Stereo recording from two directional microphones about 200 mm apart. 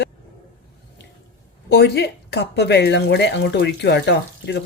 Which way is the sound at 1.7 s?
55° left (ahead or behind).